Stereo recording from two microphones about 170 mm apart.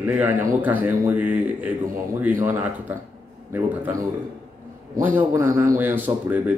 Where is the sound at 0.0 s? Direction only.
10° right (ahead or behind).